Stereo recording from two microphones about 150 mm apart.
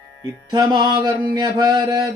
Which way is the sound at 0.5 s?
30° right (ahead or behind).